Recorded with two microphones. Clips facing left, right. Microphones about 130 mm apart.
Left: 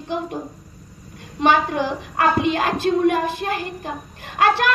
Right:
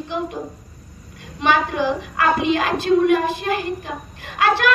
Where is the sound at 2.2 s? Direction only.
45° left (ahead or behind).